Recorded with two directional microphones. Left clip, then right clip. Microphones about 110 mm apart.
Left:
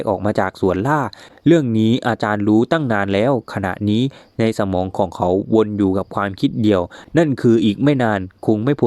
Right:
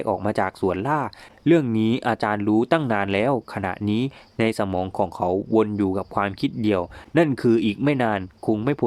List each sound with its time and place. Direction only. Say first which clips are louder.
0.0 s speech: left 4 dB; 30° left (ahead or behind)